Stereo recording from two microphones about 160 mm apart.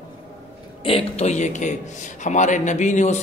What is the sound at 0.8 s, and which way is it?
A man's voice, 35° left (ahead or behind).